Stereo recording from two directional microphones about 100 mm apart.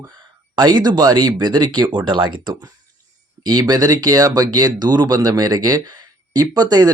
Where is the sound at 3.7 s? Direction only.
40° right (ahead or behind).